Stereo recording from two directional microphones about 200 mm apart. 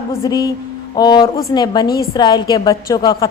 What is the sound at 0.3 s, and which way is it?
Speech, 20° left (ahead or behind).